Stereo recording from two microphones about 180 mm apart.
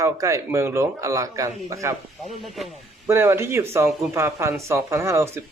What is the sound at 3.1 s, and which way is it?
Speech, 15° right (ahead or behind).